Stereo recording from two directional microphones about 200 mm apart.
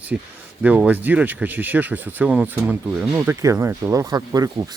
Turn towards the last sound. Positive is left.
turn(degrees=-20)  # may be behind; listen again after turning